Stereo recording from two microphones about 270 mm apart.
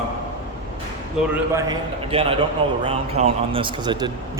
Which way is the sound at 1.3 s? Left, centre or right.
Centre.